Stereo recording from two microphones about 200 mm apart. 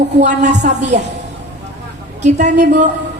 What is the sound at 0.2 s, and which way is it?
Speech, 35° right (ahead or behind).